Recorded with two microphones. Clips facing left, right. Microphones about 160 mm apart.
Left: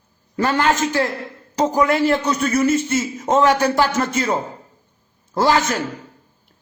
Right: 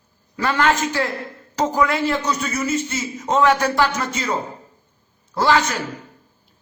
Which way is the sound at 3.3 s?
40° left (ahead or behind).